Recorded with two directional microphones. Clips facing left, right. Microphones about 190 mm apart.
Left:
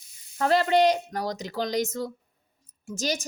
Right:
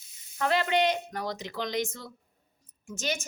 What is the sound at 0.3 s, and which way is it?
A woman's voice, 40° left (ahead or behind).